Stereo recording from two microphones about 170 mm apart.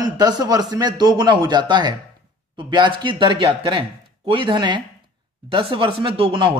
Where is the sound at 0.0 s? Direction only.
25° right (ahead or behind).